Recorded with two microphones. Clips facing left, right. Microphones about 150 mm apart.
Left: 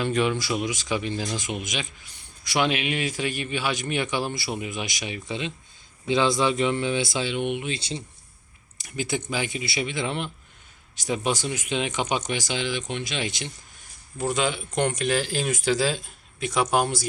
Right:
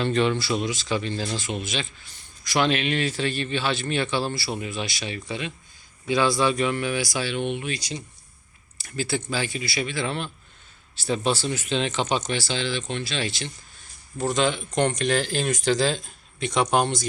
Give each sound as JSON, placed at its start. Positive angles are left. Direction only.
{"t": 0.0, "sound": "a man's voice", "side_deg": 10}
{"t": 8.8, "sound": "a man's voice", "side_deg": 20}